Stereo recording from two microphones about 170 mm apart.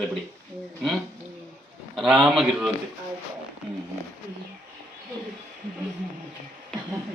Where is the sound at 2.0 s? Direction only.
Centre (ahead or behind).